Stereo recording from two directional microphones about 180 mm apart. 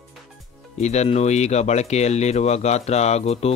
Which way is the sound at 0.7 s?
40° left (ahead or behind).